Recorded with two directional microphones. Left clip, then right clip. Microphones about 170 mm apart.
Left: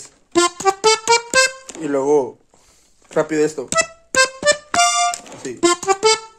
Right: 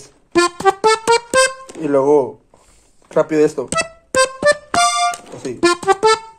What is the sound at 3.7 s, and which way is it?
Music, 20° left (ahead or behind).